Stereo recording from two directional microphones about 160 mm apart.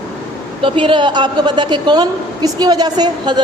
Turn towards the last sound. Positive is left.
turn(degrees=-25)  # may be behind; listen again after turning